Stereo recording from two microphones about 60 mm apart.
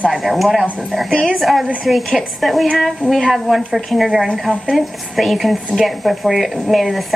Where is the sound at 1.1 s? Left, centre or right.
Centre.